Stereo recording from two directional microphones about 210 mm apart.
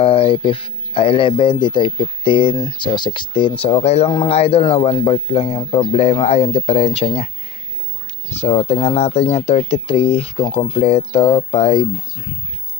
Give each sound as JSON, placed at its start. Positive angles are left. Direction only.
{"t": 0.0, "sound": "speech", "side_deg": 25}
{"t": 8.4, "sound": "speech", "side_deg": 30}